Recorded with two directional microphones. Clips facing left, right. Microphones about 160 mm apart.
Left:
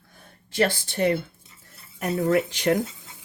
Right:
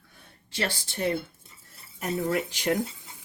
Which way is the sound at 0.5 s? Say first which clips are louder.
Left 8 dB; 55° left (ahead or behind).